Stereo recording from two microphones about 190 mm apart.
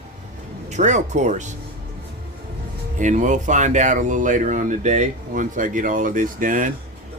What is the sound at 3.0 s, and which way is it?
Speech, 40° right (ahead or behind).